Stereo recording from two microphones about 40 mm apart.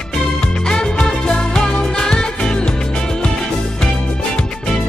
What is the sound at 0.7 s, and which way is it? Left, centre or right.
Music, left.